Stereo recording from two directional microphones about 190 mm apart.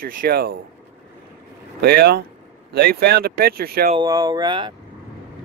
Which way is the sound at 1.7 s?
60° right (ahead or behind).